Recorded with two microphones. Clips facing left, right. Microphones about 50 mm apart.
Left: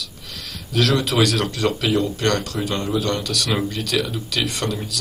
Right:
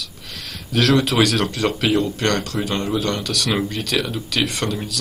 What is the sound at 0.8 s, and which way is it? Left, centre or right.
Speech, right.